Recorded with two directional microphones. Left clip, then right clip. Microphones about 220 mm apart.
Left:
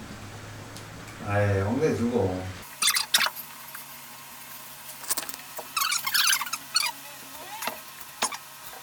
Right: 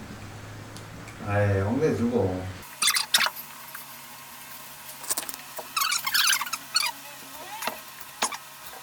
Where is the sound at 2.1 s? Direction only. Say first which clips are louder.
Even; 30° right (ahead or behind).